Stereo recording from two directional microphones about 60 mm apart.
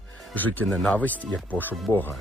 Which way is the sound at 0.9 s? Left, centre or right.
Left.